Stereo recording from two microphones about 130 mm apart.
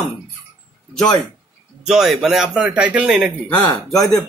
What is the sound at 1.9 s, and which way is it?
A man's voice, 5° right (ahead or behind).